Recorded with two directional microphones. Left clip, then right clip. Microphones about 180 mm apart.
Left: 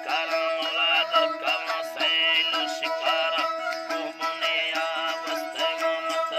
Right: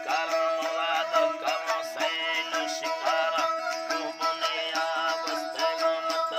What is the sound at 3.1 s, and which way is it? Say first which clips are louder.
Music: left 1 dB; 25° left (ahead or behind).